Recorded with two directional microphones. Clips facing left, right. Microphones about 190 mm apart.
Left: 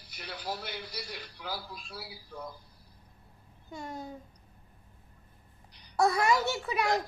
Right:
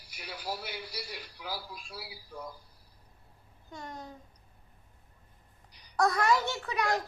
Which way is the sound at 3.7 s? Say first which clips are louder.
Left 3 dB; 5° left (ahead or behind).